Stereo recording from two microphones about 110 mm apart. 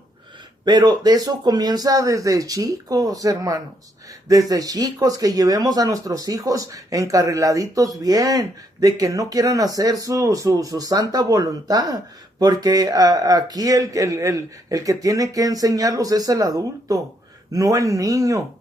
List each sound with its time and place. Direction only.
0.7 s speech: 40° right (ahead or behind)